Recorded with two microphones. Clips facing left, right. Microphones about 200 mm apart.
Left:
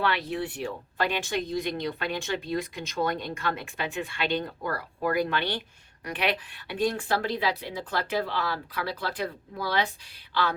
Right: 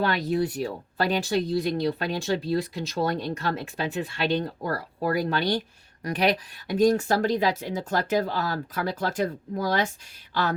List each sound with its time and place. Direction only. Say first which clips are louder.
0.0 s speech: right 4 dB; 40° right (ahead or behind)